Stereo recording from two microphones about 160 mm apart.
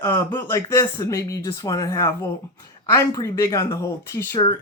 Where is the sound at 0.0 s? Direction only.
15° left (ahead or behind).